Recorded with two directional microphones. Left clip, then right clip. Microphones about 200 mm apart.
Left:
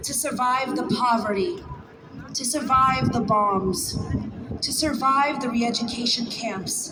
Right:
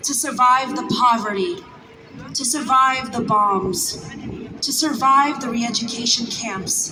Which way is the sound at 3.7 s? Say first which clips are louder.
Right 5 dB; 50° left (ahead or behind).